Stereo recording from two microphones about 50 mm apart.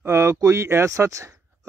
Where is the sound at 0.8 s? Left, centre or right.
Right.